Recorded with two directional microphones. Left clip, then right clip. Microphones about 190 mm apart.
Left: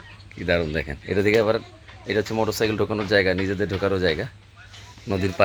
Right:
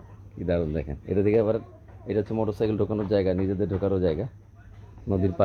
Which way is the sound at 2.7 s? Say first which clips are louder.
Left 3 dB; 35° left (ahead or behind).